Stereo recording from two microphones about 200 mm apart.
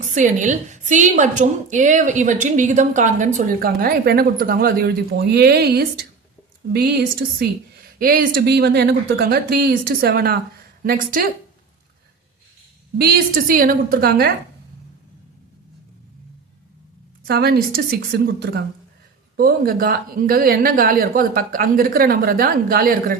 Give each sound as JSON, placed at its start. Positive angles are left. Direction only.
{"t": 0.1, "sound": "a woman's voice", "side_deg": -40}
{"t": 13.0, "sound": "speech", "side_deg": -50}
{"t": 17.2, "sound": "speech", "side_deg": -50}